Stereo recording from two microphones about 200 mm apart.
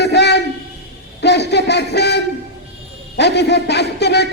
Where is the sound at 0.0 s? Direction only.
55° left (ahead or behind).